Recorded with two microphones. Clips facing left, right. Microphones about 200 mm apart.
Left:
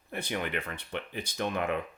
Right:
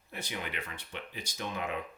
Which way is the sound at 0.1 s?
55° left (ahead or behind).